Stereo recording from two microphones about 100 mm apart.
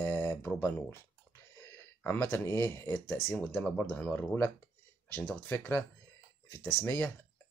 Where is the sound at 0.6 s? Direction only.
20° left (ahead or behind).